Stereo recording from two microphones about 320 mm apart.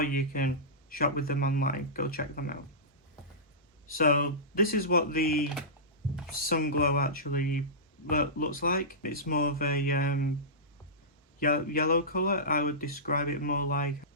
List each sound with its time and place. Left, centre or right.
0.0 s speech: left
3.9 s speech: left
11.3 s speech: left